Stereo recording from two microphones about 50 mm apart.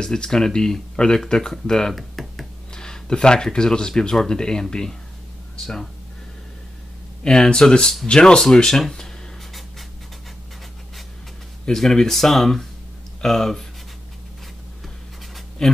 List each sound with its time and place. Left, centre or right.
0.0 s speech: centre
2.0 s a sound: centre
2.7 s speech: centre
7.2 s speech: centre
8.5 s writing: centre
11.6 s speech: centre
15.6 s speech: centre